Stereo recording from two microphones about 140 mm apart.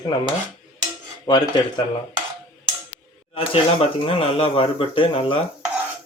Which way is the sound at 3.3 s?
45° left (ahead or behind).